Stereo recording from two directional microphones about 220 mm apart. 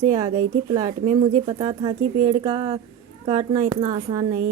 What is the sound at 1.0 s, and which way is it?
Mantra, 35° right (ahead or behind).